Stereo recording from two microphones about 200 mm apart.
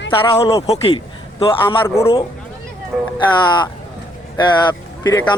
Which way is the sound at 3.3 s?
20° left (ahead or behind).